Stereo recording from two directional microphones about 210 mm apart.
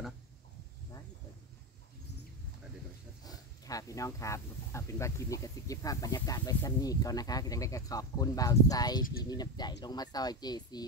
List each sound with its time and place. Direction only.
3.3 s speech: 15° left (ahead or behind)